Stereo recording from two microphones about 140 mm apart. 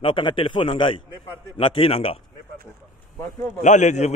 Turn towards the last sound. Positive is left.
turn(degrees=55)  # may be behind; listen again after turning